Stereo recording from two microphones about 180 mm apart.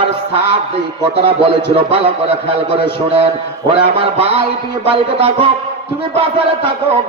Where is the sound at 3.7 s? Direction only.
30° right (ahead or behind).